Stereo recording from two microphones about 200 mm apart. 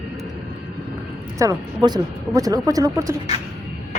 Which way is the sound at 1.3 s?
15° right (ahead or behind).